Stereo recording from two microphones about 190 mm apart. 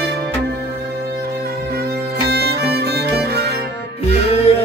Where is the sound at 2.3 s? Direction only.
55° right (ahead or behind).